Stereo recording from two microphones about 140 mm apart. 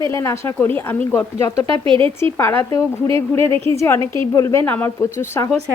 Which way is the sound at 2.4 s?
20° left (ahead or behind).